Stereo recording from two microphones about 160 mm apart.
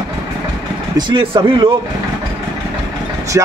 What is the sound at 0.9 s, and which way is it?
Speech, 30° right (ahead or behind).